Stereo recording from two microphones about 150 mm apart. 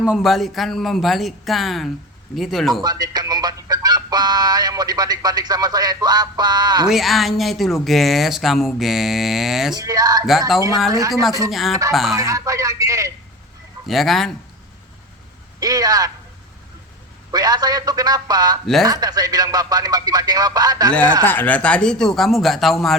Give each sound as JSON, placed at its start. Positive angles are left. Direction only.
{"t": 0.0, "sound": "speech", "side_deg": -5}
{"t": 2.8, "sound": "music", "side_deg": -25}
{"t": 6.8, "sound": "speech", "side_deg": 0}
{"t": 9.7, "sound": "speech", "side_deg": -25}
{"t": 11.1, "sound": "speech", "side_deg": 0}
{"t": 12.1, "sound": "speech", "side_deg": -20}
{"t": 13.8, "sound": "speech", "side_deg": 0}
{"t": 15.6, "sound": "speech", "side_deg": -25}
{"t": 17.3, "sound": "speech", "side_deg": -25}
{"t": 18.6, "sound": "speech", "side_deg": 0}
{"t": 18.9, "sound": "speech", "side_deg": -25}
{"t": 21.2, "sound": "speech", "side_deg": 10}